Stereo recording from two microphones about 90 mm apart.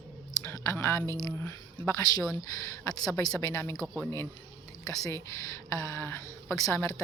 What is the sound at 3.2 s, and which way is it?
Speech, 45° left (ahead or behind).